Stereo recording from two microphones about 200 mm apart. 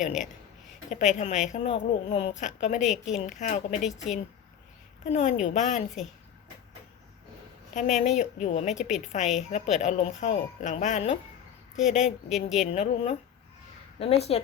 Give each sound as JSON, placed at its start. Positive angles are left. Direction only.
{"t": 0.0, "sound": "a woman's voice", "side_deg": 40}
{"t": 5.0, "sound": "a woman's voice", "side_deg": 35}
{"t": 7.7, "sound": "a woman's voice", "side_deg": 40}